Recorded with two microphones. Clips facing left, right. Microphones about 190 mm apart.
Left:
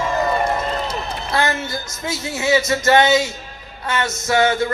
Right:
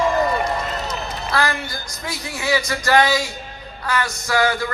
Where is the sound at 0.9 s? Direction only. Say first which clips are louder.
Left 1 dB; 25° left (ahead or behind).